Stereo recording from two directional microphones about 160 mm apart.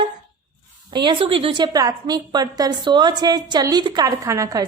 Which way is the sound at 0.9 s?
30° right (ahead or behind).